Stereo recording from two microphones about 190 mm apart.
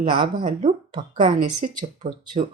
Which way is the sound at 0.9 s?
25° right (ahead or behind).